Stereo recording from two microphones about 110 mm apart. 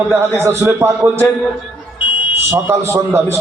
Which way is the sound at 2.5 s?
20° right (ahead or behind).